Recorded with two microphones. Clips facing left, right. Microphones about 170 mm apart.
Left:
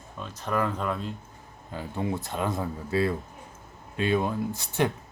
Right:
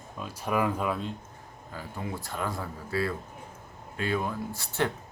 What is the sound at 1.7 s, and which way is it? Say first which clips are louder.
Speech: left 6 dB; 25° left (ahead or behind).